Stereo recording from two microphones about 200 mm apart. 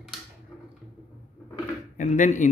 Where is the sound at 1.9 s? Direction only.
40° left (ahead or behind).